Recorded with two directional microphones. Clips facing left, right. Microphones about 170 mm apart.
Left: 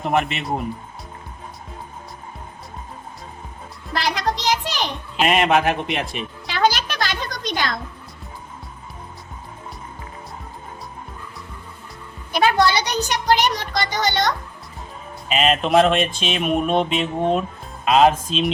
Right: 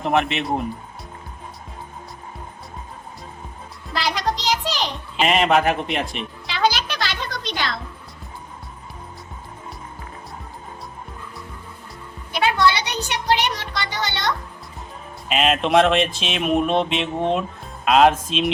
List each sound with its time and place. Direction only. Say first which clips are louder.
0.0 s speech: right 1 dB; centre (ahead or behind)
3.9 s music: left 1 dB; 50° left (ahead or behind)
5.1 s speech: even; centre (ahead or behind)
6.5 s music: left 1 dB; 45° left (ahead or behind)
12.3 s music: left 2 dB; 40° left (ahead or behind)
15.3 s speech: even; centre (ahead or behind)